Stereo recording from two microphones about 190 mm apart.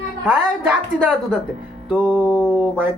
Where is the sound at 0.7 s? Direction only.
5° right (ahead or behind).